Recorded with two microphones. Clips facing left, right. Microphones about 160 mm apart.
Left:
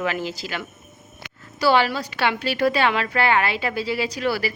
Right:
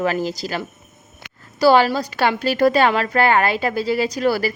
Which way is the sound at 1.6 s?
40° right (ahead or behind).